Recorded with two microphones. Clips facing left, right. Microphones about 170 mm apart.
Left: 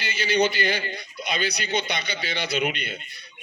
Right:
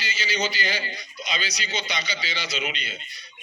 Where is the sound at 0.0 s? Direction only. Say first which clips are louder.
Left 6 dB; 55° left (ahead or behind).